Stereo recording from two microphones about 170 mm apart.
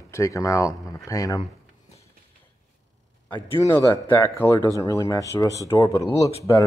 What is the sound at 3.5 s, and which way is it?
Speech, 15° left (ahead or behind).